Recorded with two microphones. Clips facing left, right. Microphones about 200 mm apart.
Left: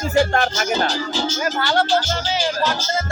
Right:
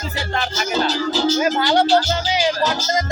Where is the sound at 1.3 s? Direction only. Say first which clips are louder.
Right 1 dB; 20° right (ahead or behind).